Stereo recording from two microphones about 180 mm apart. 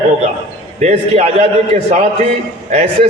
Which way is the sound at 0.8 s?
35° right (ahead or behind).